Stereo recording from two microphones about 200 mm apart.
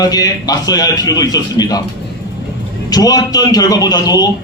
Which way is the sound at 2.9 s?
20° left (ahead or behind).